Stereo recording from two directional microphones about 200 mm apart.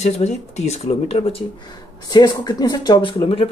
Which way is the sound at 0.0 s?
35° left (ahead or behind).